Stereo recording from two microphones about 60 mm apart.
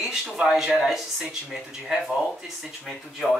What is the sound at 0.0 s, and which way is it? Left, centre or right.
Speech, centre.